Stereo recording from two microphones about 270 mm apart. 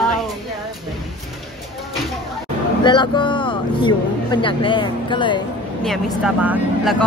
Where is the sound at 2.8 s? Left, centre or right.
Centre.